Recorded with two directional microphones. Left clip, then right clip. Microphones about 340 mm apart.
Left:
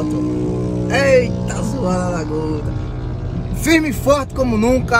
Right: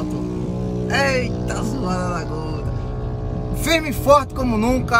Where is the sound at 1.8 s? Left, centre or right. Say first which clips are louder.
Left 5 dB; centre.